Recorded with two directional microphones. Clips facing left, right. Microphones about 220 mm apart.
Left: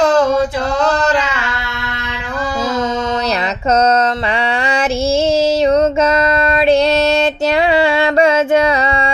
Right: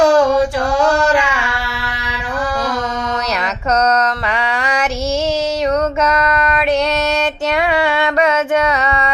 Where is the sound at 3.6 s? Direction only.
25° left (ahead or behind).